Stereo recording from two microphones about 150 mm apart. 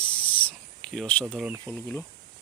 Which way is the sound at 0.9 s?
5° left (ahead or behind).